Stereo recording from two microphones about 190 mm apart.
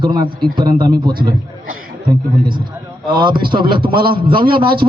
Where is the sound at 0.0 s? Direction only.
25° right (ahead or behind).